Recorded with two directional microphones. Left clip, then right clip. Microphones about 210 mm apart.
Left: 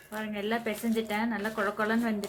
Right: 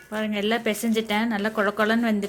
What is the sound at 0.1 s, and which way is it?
Speech, 45° right (ahead or behind).